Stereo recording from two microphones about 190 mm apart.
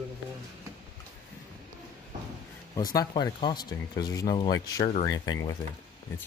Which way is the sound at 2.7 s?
20° left (ahead or behind).